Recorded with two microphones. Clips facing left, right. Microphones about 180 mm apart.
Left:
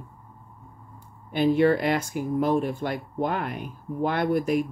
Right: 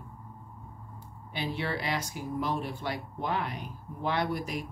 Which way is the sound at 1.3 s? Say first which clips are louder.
Left 14 dB; 50° left (ahead or behind).